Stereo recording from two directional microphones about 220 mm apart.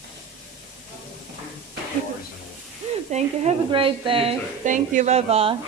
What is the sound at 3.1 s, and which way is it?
Speech, 30° right (ahead or behind).